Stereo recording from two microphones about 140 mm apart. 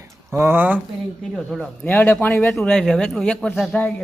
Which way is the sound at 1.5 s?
5° left (ahead or behind).